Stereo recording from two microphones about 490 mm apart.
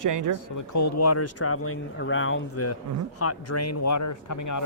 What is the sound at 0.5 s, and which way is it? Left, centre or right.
Speech, left.